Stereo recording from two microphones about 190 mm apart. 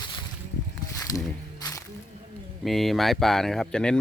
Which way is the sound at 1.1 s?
20° left (ahead or behind).